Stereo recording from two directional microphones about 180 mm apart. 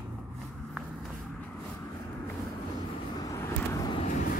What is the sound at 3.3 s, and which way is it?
Vehicle, 20° left (ahead or behind).